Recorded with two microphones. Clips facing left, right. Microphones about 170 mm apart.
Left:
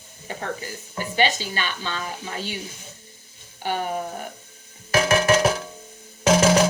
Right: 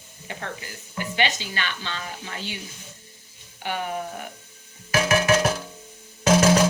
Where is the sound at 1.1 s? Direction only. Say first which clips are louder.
Left 4 dB; 40° left (ahead or behind).